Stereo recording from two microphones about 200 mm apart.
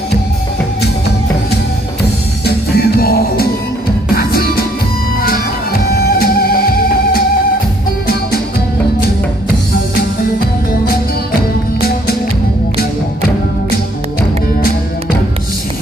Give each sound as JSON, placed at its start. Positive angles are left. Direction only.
{"t": 2.4, "sound": "music", "side_deg": 50}
{"t": 5.9, "sound": "music", "side_deg": 50}